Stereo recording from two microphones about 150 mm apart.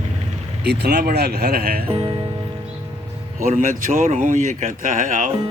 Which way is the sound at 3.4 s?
60° right (ahead or behind).